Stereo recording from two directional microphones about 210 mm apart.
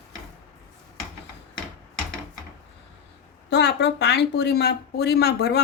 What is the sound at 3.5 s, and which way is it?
Speech, 55° left (ahead or behind).